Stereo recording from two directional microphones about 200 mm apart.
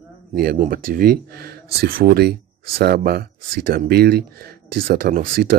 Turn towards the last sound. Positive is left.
turn(degrees=-45)  # may be behind; listen again after turning